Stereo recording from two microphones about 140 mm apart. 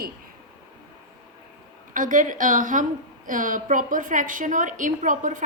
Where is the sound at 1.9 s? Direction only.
70° right (ahead or behind).